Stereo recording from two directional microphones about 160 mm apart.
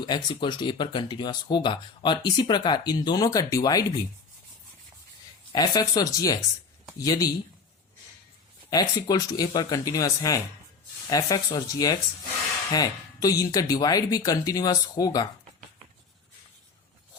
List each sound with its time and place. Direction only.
0.4 s speech: 30° left (ahead or behind)
5.5 s speech: 25° left (ahead or behind)
8.7 s speech: 25° left (ahead or behind)